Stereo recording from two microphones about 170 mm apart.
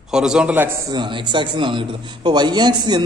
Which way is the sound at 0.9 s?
25° right (ahead or behind).